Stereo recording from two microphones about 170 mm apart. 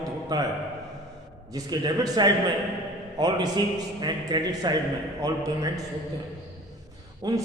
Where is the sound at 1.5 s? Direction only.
20° right (ahead or behind).